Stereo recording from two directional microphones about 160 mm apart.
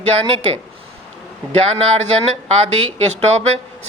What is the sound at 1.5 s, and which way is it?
Speech, 40° right (ahead or behind).